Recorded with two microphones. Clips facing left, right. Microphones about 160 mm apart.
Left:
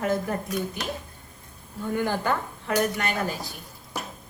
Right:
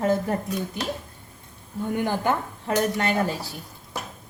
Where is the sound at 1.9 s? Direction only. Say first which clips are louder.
Right 1 dB; 20° right (ahead or behind).